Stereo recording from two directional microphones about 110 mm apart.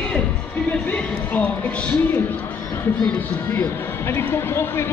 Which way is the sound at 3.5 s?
20° left (ahead or behind).